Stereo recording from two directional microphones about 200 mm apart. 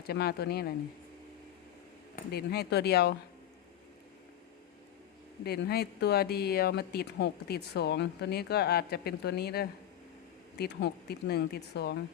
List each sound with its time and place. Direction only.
0.1 s speech: 50° left (ahead or behind)
2.1 s speech: 55° left (ahead or behind)
5.5 s speech: 55° left (ahead or behind)